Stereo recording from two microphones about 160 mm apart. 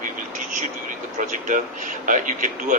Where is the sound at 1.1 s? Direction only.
55° right (ahead or behind).